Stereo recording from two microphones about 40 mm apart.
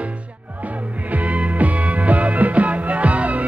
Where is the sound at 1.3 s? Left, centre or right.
Right.